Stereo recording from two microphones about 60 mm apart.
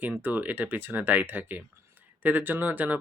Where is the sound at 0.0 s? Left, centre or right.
Right.